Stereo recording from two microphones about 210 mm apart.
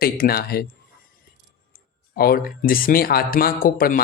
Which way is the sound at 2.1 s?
45° left (ahead or behind).